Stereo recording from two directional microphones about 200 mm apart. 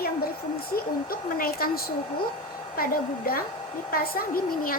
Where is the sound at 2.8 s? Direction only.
45° left (ahead or behind).